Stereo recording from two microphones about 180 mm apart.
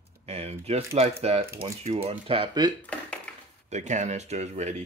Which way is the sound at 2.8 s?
5° left (ahead or behind).